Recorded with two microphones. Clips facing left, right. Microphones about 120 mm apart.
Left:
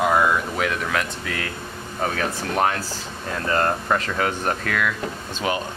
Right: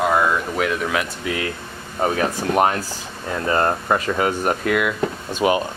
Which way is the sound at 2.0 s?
20° right (ahead or behind).